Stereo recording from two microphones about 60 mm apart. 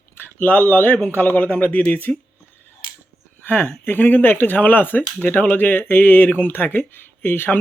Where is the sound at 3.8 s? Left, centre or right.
Left.